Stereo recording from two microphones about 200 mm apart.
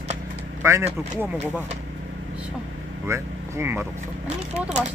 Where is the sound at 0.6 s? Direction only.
15° right (ahead or behind).